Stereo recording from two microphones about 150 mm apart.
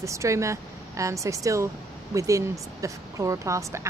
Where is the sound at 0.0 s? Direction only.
20° right (ahead or behind).